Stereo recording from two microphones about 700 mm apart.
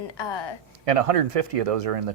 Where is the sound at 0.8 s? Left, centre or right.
Right.